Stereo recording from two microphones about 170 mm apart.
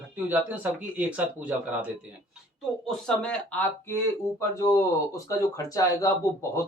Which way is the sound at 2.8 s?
5° left (ahead or behind).